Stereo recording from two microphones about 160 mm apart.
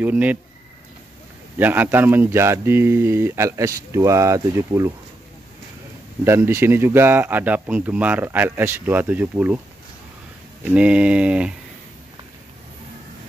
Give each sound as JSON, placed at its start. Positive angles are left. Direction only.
{"t": 0.0, "sound": "speech", "side_deg": -10}
{"t": 1.6, "sound": "speech", "side_deg": -10}
{"t": 6.2, "sound": "speech", "side_deg": -15}
{"t": 10.6, "sound": "speech", "side_deg": -10}